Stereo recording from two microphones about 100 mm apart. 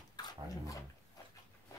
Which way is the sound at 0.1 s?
45° left (ahead or behind).